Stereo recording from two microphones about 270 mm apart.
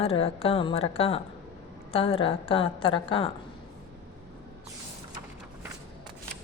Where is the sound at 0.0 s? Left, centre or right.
Left.